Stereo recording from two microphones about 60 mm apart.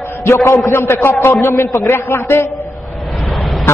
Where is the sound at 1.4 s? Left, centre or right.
Left.